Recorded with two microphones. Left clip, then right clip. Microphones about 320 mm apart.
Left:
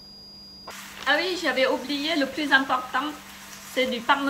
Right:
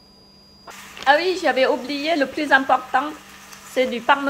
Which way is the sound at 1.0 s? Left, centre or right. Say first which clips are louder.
Right 6 dB; centre.